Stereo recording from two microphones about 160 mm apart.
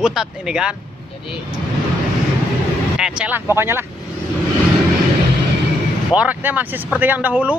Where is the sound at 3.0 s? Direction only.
10° right (ahead or behind).